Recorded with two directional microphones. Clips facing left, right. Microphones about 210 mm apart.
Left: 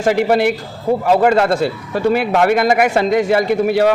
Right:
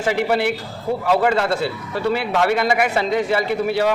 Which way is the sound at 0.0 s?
45° left (ahead or behind).